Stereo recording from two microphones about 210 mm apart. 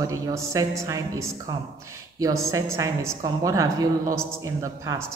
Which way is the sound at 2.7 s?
15° right (ahead or behind).